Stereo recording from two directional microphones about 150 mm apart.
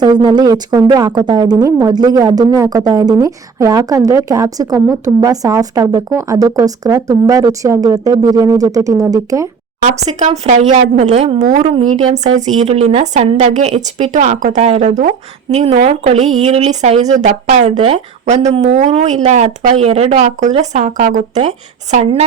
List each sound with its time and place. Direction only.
0.0 s speech: 30° right (ahead or behind)
10.2 s speech: 50° right (ahead or behind)